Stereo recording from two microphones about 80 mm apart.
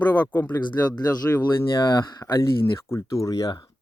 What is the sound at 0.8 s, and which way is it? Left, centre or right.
Speech, left.